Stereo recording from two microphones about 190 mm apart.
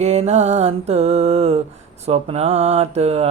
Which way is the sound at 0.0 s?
35° right (ahead or behind).